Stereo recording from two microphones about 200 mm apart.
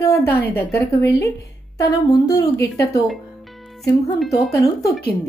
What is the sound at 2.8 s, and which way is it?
Speech, 15° left (ahead or behind).